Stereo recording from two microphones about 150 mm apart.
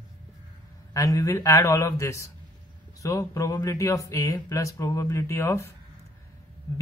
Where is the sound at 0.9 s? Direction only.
20° left (ahead or behind).